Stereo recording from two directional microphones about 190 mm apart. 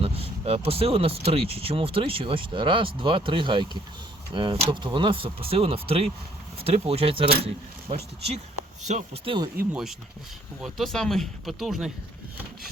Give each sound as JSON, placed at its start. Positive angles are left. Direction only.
{"t": 0.0, "sound": "speech", "side_deg": -30}
{"t": 10.6, "sound": "speech", "side_deg": 0}